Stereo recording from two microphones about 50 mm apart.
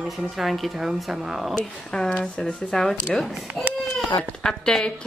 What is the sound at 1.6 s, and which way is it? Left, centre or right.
Speech, centre.